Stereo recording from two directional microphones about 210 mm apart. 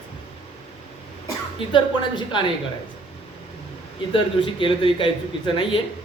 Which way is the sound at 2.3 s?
25° left (ahead or behind).